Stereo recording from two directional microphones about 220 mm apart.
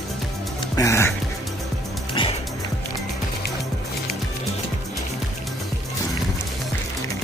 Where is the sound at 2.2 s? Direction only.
25° left (ahead or behind).